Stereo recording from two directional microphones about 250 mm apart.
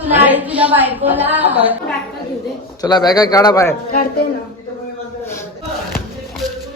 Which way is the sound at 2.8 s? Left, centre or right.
Centre.